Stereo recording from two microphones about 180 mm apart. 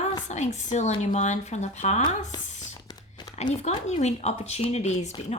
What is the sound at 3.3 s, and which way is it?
Speech, 40° left (ahead or behind).